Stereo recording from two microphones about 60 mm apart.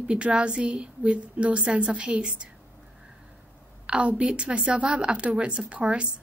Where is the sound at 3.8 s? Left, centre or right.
Right.